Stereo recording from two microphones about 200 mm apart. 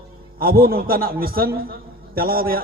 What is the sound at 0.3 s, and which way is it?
A man's voice, 50° right (ahead or behind).